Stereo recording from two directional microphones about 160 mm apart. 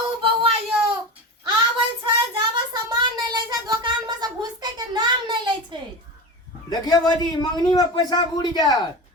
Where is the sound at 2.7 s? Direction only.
25° right (ahead or behind).